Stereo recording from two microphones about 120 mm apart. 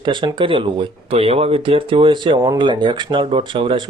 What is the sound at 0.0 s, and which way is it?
Speech, 40° right (ahead or behind).